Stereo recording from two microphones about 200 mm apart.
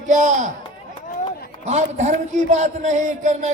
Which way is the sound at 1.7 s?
35° right (ahead or behind).